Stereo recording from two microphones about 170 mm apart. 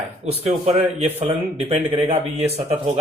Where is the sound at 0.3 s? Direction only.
40° right (ahead or behind).